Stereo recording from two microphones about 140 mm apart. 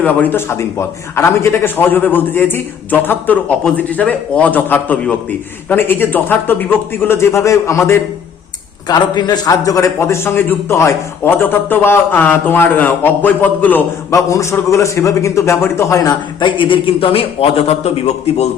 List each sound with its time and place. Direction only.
0.0 s a man's voice: 15° left (ahead or behind)
8.9 s a man's voice: 30° left (ahead or behind); by 18.4 s 50° left (ahead or behind)